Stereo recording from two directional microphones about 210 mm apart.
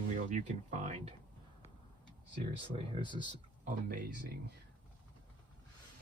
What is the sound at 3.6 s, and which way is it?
Speech, 45° right (ahead or behind).